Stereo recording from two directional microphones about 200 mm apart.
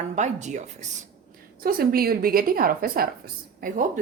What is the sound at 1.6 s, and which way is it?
A woman's voice, 45° right (ahead or behind).